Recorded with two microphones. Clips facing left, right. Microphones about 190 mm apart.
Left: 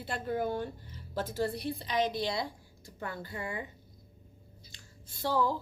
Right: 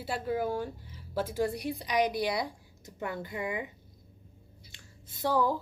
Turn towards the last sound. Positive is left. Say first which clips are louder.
# right 2 dB
turn(degrees=-15)  # may be behind; listen again after turning